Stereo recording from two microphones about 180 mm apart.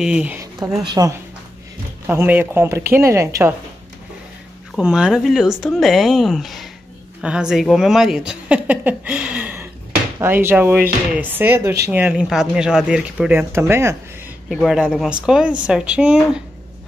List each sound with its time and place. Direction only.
0.0 s speech: 5° right (ahead or behind)
0.8 s speech: 20° right (ahead or behind)
2.0 s speech: 10° right (ahead or behind)
4.7 s a woman's voice: 5° right (ahead or behind)
14.5 s a woman's voice: centre (ahead or behind)